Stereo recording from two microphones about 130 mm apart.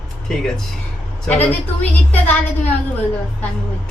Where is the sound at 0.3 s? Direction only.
5° left (ahead or behind).